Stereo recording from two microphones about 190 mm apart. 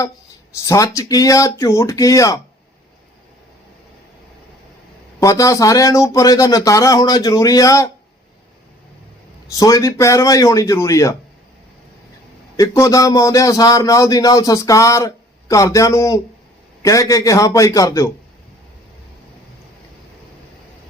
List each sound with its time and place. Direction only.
0.6 s a man's voice: 15° left (ahead or behind)
5.2 s a man's voice: 15° left (ahead or behind)
9.5 s a man's voice: 15° left (ahead or behind)
12.5 s a man's voice: 15° left (ahead or behind)